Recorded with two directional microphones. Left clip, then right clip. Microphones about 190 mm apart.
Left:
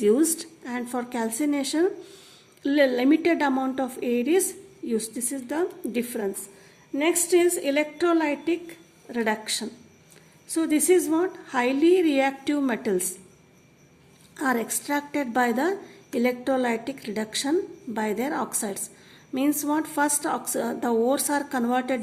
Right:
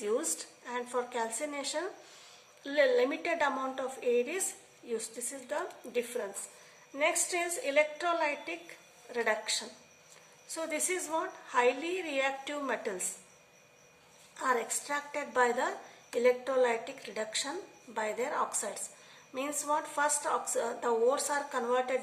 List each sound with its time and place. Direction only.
0.0 s a woman's voice: 45° left (ahead or behind)
14.3 s a woman's voice: 50° left (ahead or behind)